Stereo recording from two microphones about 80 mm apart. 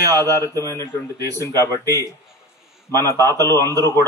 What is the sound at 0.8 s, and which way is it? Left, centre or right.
Speech, right.